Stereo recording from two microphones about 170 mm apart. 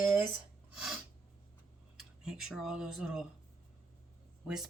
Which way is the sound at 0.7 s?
Centre (ahead or behind).